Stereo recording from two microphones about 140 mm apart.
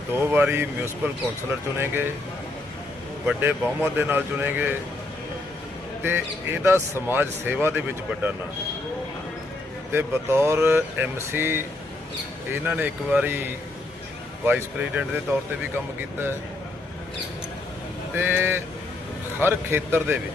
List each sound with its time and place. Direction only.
0.1 s speech: 15° right (ahead or behind)
3.2 s speech: 15° right (ahead or behind)
6.0 s speech: 15° right (ahead or behind)
9.9 s speech: 15° right (ahead or behind)
12.6 s speech: 15° right (ahead or behind)
18.1 s speech: 15° right (ahead or behind)